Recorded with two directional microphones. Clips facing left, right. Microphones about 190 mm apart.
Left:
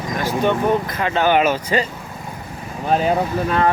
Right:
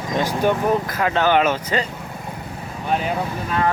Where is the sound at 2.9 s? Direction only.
35° left (ahead or behind).